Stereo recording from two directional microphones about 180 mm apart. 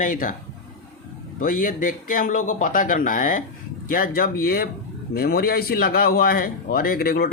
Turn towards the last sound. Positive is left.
turn(degrees=55)  # may be behind; listen again after turning